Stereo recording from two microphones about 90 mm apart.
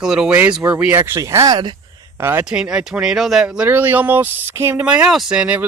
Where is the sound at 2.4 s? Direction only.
10° right (ahead or behind); by 4.8 s 25° right (ahead or behind).